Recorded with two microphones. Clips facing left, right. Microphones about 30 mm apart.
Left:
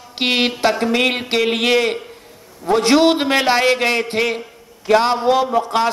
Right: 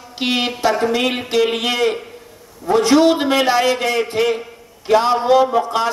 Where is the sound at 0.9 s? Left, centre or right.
Left.